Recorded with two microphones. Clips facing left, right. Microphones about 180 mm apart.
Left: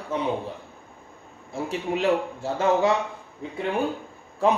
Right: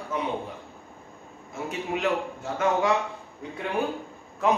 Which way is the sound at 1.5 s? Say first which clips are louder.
Left 3 dB; 30° left (ahead or behind).